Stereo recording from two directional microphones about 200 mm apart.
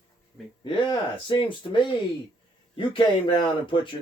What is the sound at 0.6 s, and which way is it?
Speech, 25° left (ahead or behind).